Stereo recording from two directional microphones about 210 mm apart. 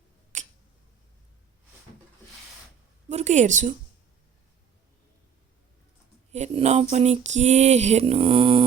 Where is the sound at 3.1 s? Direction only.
35° right (ahead or behind).